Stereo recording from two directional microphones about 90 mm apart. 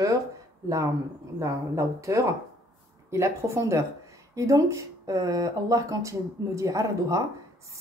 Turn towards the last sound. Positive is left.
turn(degrees=-35)  # may be behind; listen again after turning